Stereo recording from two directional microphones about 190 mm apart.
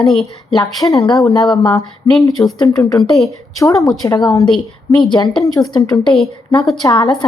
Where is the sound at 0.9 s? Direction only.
20° left (ahead or behind).